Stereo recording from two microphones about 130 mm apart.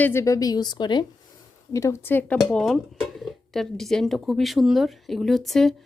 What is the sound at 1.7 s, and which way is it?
Speech, 20° left (ahead or behind).